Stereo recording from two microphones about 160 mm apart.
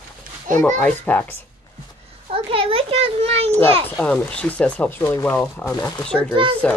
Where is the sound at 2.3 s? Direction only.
35° right (ahead or behind).